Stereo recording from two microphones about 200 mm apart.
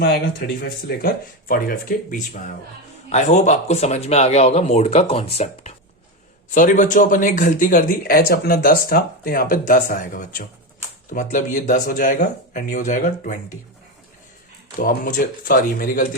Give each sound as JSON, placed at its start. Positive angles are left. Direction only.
{"t": 0.0, "sound": "speech", "side_deg": 50}
{"t": 14.8, "sound": "speech", "side_deg": 40}